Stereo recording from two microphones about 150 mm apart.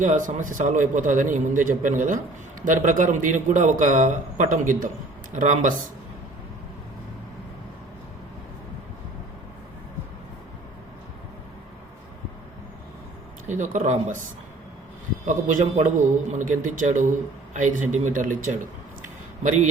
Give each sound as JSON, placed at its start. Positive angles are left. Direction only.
{"t": 0.0, "sound": "a man's voice", "side_deg": -60}
{"t": 13.5, "sound": "speech", "side_deg": -55}
{"t": 15.3, "sound": "a man's voice", "side_deg": -60}
{"t": 19.0, "sound": "a sound", "side_deg": -55}